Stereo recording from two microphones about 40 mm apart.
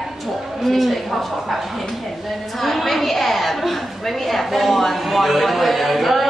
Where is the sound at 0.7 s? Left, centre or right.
Centre.